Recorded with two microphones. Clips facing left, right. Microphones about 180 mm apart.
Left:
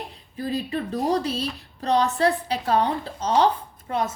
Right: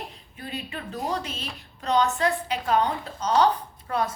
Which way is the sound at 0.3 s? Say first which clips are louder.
Left 9 dB; 35° left (ahead or behind).